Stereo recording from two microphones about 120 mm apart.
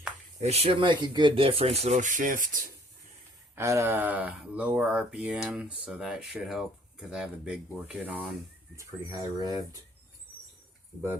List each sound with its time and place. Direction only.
0.4 s speech: 60° right (ahead or behind); by 2.5 s 90° right
3.5 s speech: 20° right (ahead or behind)
8.7 s speech: 25° right (ahead or behind)